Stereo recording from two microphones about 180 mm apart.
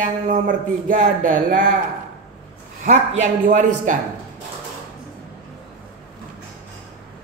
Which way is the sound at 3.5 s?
45° right (ahead or behind).